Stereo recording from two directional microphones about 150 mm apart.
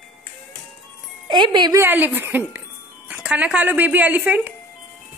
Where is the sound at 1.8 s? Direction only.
10° right (ahead or behind).